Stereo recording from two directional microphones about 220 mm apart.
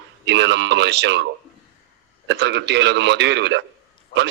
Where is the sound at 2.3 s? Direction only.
50° right (ahead or behind).